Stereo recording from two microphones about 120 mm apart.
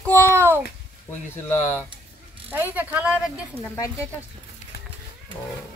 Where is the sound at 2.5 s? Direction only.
15° right (ahead or behind).